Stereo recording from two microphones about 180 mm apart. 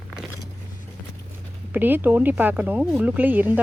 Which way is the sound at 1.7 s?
10° right (ahead or behind).